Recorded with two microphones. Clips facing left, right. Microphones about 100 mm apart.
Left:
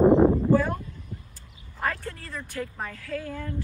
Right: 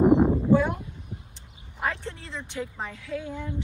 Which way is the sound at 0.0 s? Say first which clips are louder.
Left 2 dB; 15° right (ahead or behind).